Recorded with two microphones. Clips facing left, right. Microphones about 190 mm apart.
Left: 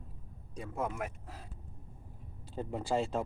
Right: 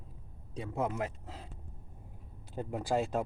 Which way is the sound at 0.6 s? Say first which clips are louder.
Right 3 dB; 25° right (ahead or behind).